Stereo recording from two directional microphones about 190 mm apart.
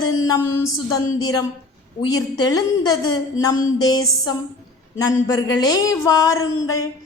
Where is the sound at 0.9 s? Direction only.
20° left (ahead or behind).